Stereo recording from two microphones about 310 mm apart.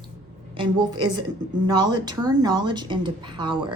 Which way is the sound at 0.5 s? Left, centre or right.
Centre.